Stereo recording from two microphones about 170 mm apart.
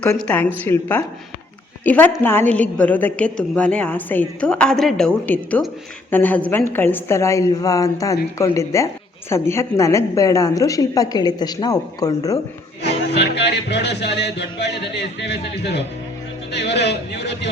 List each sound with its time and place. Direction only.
0.2 s a woman's voice: 10° left (ahead or behind)
13.1 s a man's voice: 85° left